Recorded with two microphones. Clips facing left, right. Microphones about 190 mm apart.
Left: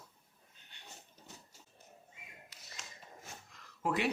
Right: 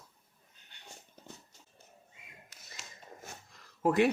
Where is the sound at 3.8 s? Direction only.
45° right (ahead or behind).